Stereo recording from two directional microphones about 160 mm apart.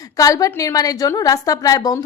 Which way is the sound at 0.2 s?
20° left (ahead or behind).